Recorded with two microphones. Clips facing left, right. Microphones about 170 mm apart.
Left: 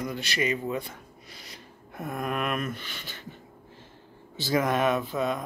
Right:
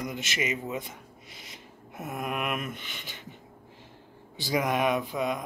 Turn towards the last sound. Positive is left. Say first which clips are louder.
# left 1 dB
turn(degrees=-15)  # may be behind; listen again after turning